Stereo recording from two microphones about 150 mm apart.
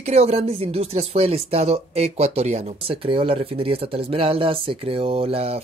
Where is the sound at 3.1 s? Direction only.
35° right (ahead or behind).